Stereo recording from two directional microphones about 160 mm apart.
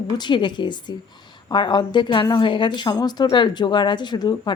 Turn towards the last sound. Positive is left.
turn(degrees=25)  # may be behind; listen again after turning